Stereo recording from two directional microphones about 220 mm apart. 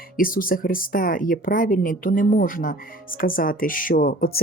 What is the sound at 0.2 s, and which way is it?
Speech, 40° left (ahead or behind).